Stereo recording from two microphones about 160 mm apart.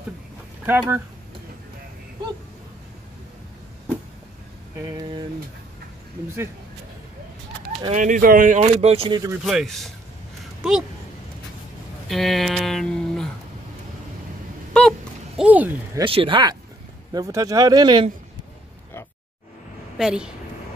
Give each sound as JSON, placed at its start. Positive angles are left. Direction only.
{"t": 0.7, "sound": "speech", "side_deg": -15}
{"t": 7.9, "sound": "speech", "side_deg": -50}
{"t": 9.4, "sound": "speech", "side_deg": -5}
{"t": 12.1, "sound": "speech", "side_deg": 0}
{"t": 14.7, "sound": "a sound", "side_deg": 5}
{"t": 15.4, "sound": "speech", "side_deg": -10}
{"t": 16.0, "sound": "speech", "side_deg": -35}
{"t": 20.0, "sound": "speech", "side_deg": -5}